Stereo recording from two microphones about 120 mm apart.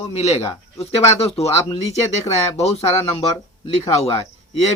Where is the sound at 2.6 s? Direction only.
60° left (ahead or behind).